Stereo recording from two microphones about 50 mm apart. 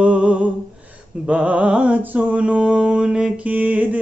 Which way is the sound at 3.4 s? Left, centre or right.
Right.